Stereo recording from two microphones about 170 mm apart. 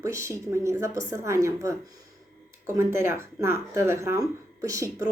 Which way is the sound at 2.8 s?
15° right (ahead or behind).